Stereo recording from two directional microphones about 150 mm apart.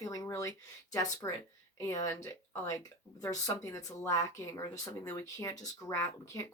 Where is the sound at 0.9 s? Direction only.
25° left (ahead or behind).